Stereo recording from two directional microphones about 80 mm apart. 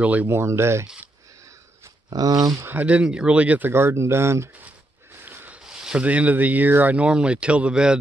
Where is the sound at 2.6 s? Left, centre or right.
Centre; by 4.5 s right.